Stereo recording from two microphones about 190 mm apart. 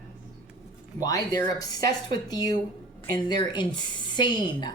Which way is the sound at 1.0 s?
20° left (ahead or behind).